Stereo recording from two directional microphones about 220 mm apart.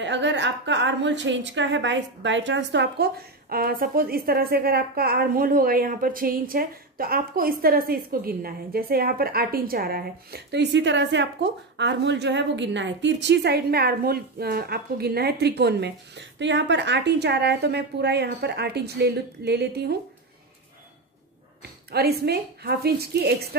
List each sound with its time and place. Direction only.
0.0 s a woman's voice: 55° right (ahead or behind)
21.9 s a woman's voice: 45° right (ahead or behind)